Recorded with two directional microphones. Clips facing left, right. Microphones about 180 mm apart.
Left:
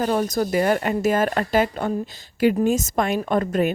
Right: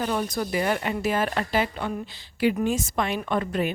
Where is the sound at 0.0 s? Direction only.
45° left (ahead or behind).